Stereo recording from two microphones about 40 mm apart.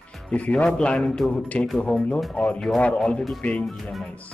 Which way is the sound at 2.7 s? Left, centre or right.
Left.